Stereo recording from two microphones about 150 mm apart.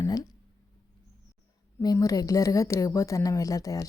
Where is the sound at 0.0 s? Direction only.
25° left (ahead or behind).